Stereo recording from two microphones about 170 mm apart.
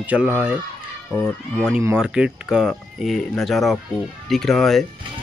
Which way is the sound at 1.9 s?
5° right (ahead or behind).